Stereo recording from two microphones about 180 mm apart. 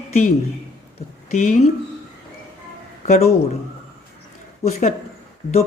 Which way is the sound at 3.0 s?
40° left (ahead or behind).